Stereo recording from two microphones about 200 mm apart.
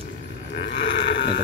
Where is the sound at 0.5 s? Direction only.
60° left (ahead or behind).